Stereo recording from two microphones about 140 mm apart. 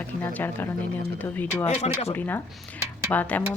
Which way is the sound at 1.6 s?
50° left (ahead or behind).